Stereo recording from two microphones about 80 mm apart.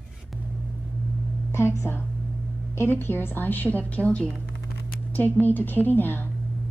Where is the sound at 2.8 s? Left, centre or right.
Left.